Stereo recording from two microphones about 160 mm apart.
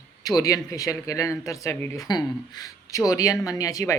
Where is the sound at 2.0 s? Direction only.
25° left (ahead or behind).